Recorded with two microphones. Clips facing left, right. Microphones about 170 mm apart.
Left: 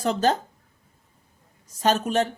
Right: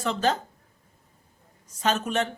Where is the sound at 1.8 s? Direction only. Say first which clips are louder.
Left 4 dB; 35° left (ahead or behind).